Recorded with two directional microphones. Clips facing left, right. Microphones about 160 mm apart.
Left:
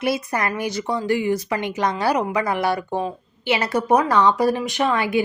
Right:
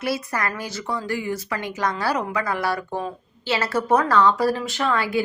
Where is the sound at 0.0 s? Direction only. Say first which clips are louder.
Left 3 dB; 20° left (ahead or behind).